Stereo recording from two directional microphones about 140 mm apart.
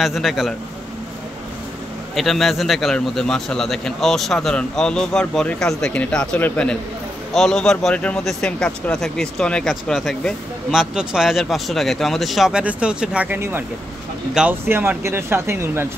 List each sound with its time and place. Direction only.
0.0 s speech: centre (ahead or behind)
2.1 s speech: centre (ahead or behind); by 16.0 s 15° right (ahead or behind)